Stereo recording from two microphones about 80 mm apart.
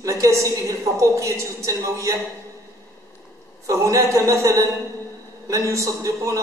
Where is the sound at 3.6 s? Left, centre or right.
Right.